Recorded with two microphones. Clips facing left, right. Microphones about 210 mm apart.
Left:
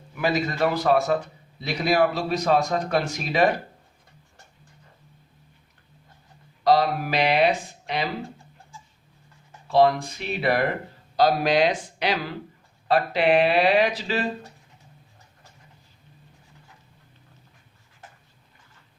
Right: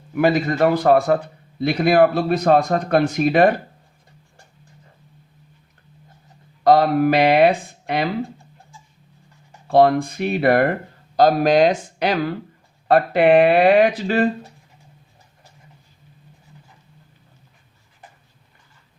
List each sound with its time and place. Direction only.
0.2 s speech: 50° right (ahead or behind)
6.7 s speech: 55° right (ahead or behind)
9.6 s speech: 55° right (ahead or behind)